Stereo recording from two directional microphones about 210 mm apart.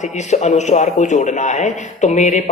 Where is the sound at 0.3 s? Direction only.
35° left (ahead or behind).